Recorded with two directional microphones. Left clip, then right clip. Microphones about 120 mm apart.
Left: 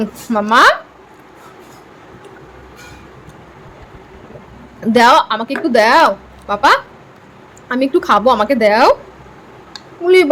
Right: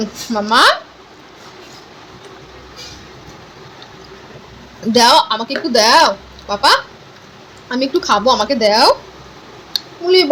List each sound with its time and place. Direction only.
0.0 s speech: 20° left (ahead or behind)
4.9 s a woman's voice: 15° left (ahead or behind)
10.0 s a woman's voice: 20° left (ahead or behind)